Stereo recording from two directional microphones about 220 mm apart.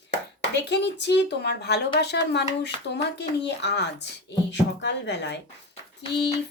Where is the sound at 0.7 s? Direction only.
50° left (ahead or behind).